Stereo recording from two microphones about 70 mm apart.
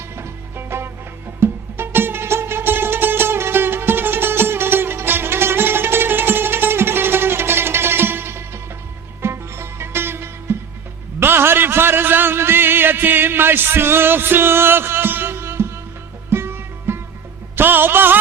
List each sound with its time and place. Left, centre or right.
0.2 s music: right
11.2 s a sound: right
16.3 s music: right